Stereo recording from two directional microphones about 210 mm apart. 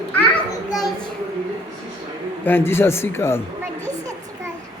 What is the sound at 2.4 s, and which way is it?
Speech, 10° left (ahead or behind).